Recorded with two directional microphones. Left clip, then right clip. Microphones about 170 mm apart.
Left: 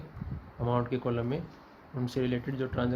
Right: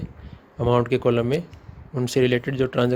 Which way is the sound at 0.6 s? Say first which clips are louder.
Right 11 dB; 65° right (ahead or behind).